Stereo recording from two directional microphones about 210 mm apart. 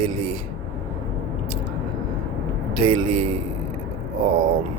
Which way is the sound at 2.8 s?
30° right (ahead or behind).